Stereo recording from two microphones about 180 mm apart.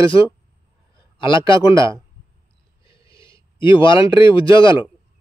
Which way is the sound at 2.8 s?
30° left (ahead or behind).